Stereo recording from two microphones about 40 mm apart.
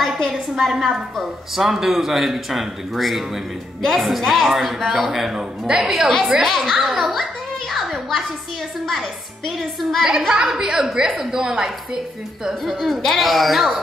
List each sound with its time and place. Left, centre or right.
0.2 s a woman's voice: centre
5.3 s a woman's voice: centre
5.9 s speech: centre
7.7 s a sound: centre
9.6 s speech: centre
10.1 s a woman's voice: centre
12.6 s speech: centre